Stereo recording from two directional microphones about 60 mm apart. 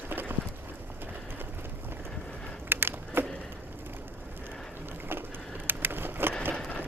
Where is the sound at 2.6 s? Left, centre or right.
Right.